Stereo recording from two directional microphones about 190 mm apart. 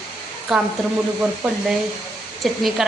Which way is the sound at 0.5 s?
Centre (ahead or behind).